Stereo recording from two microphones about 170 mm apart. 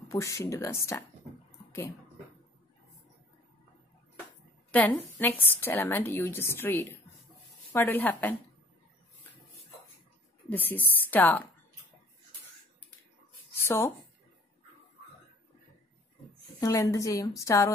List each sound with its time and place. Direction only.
0.1 s a woman's voice: 15° left (ahead or behind)
4.6 s a woman's voice: 10° left (ahead or behind)
10.5 s a woman's voice: 10° left (ahead or behind)
13.7 s a woman's voice: 15° left (ahead or behind)
16.5 s a woman's voice: 20° left (ahead or behind)